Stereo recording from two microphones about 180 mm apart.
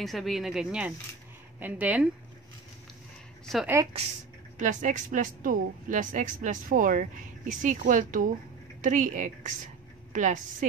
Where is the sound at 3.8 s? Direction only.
15° right (ahead or behind).